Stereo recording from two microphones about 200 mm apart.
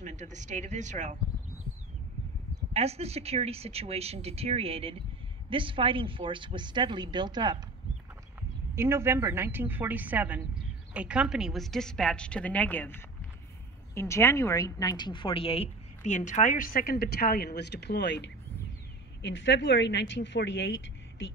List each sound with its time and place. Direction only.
0.0 s speech: 35° right (ahead or behind)
2.7 s speech: 30° right (ahead or behind)
8.7 s a woman's voice: 15° right (ahead or behind); by 21.3 s 65° left (ahead or behind)